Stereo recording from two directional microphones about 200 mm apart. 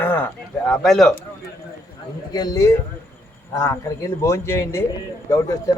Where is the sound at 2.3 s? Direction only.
20° left (ahead or behind).